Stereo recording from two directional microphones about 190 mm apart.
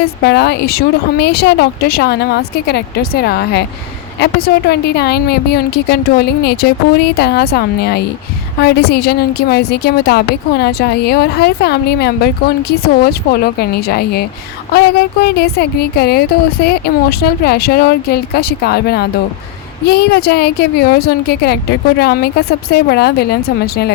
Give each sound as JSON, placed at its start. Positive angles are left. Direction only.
{"t": 0.0, "sound": "a woman's voice", "side_deg": 60}